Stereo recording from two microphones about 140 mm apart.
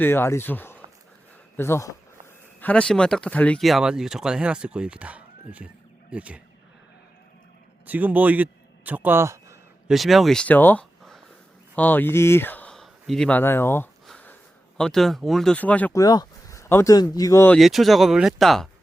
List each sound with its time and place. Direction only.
0.0 s speech: 15° left (ahead or behind); by 6.4 s 10° right (ahead or behind)
7.9 s a man's voice: 10° right (ahead or behind)
9.9 s speech: centre (ahead or behind); by 13.9 s 15° left (ahead or behind)
14.1 s a sound: 10° left (ahead or behind)
14.8 s speech: 5° left (ahead or behind)
15.9 s speech: 25° left (ahead or behind)
17.5 s speech: centre (ahead or behind)